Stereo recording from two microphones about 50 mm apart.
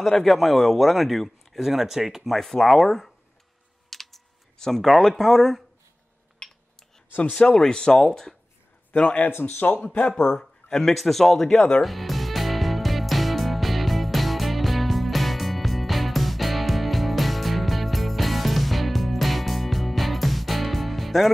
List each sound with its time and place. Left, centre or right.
0.0 s speech: centre
3.9 s computer keyboard: centre
7.1 s speech: left
7.3 s speech: centre
8.9 s speech: left
9.3 s speech: left
10.1 s speech: centre
11.8 s music: centre